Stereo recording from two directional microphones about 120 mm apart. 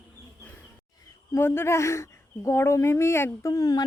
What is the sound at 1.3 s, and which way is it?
A woman's voice, 20° left (ahead or behind).